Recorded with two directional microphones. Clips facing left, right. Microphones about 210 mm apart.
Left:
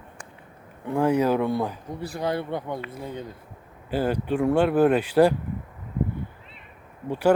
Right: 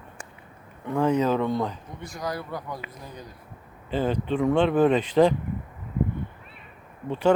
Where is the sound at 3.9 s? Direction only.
10° left (ahead or behind).